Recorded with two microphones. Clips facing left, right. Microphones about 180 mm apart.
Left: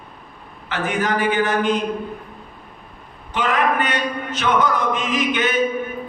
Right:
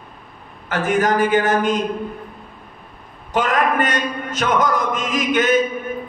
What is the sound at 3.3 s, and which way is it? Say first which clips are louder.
Speech: right 2 dB; 45° right (ahead or behind).